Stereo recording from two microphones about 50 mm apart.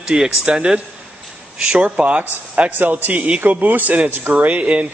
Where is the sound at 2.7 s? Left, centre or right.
Right.